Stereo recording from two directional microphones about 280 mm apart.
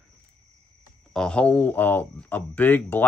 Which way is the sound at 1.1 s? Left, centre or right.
Centre.